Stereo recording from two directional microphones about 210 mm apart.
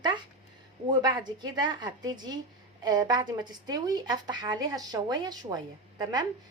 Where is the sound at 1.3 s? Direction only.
20° right (ahead or behind).